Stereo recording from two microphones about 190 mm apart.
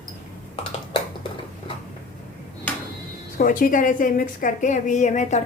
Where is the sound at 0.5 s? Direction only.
25° left (ahead or behind).